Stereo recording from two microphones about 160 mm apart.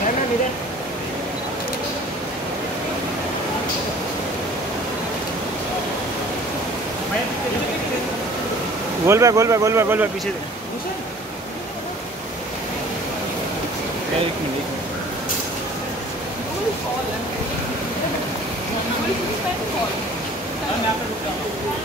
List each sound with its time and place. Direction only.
9.0 s speech: 20° right (ahead or behind)